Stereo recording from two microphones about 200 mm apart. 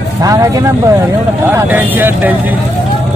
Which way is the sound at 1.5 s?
10° right (ahead or behind).